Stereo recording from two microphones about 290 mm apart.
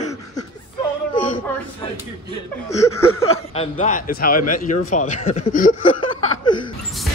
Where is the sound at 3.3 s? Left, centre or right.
Left.